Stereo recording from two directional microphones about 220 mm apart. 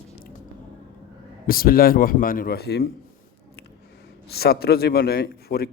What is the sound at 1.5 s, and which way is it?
A man's voice, 40° left (ahead or behind).